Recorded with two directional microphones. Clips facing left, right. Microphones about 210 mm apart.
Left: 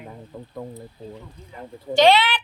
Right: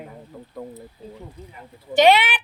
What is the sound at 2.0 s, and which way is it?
Speech, 15° right (ahead or behind).